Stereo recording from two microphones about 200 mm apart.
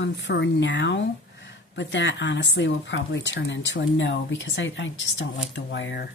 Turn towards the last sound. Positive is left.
turn(degrees=65)  # may be behind; listen again after turning